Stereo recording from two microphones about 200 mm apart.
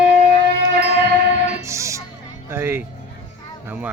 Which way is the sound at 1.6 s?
15° right (ahead or behind).